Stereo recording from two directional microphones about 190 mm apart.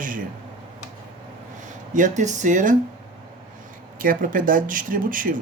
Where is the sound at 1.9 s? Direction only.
40° right (ahead or behind).